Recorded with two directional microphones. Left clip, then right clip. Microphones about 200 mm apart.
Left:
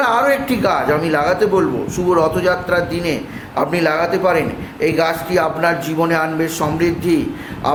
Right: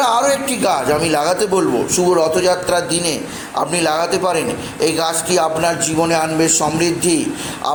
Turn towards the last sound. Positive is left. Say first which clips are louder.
# left 1 dB
turn(degrees=-10)  # may be behind; listen again after turning